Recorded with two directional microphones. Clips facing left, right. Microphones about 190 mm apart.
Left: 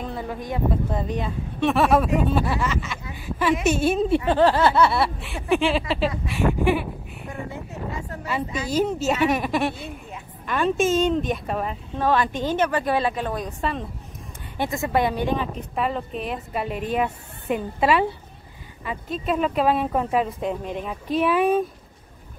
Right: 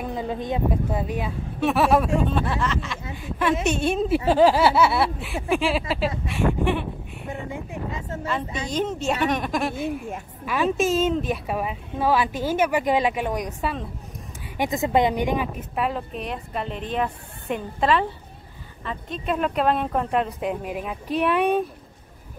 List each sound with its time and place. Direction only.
0.0 s speech: 15° right (ahead or behind)
0.9 s a woman's voice: 5° right (ahead or behind)
2.2 s a sound: 5° left (ahead or behind)
3.2 s a woman's voice: 5° left (ahead or behind)
4.3 s a woman's voice: 10° right (ahead or behind); by 7.3 s 5° left (ahead or behind)
7.5 s a sound: 15° right (ahead or behind)
8.6 s a woman's voice: 5° left (ahead or behind)
9.8 s speech: 50° right (ahead or behind)
10.4 s a woman's voice: 5° right (ahead or behind)